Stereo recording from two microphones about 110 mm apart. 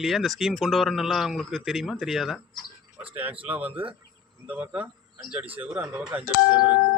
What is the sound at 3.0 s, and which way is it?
Speech, 15° right (ahead or behind).